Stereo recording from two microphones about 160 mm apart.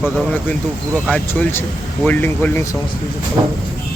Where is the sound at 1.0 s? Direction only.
10° left (ahead or behind).